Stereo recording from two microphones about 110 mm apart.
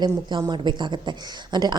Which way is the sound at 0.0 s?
40° right (ahead or behind).